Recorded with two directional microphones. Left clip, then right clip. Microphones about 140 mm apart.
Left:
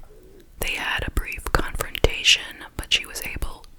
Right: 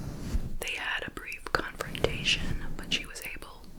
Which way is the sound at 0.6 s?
40° left (ahead or behind).